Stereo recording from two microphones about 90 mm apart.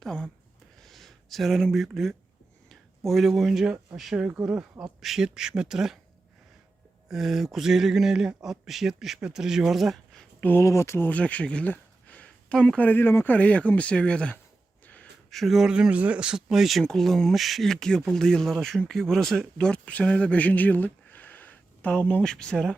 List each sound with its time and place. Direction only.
0.0 s a sound: 10° left (ahead or behind)
2.6 s speech: centre (ahead or behind)
7.1 s speech: 5° right (ahead or behind)
10.4 s speech: 30° left (ahead or behind)
11.1 s speech: 15° left (ahead or behind)
15.3 s speech: centre (ahead or behind)